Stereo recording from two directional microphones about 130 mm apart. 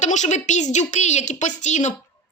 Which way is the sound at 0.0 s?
65° left (ahead or behind).